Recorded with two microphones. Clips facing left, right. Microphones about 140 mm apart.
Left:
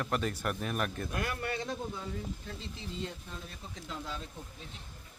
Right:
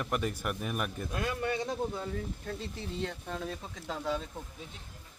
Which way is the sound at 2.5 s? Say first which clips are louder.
Right 5 dB; 55° right (ahead or behind).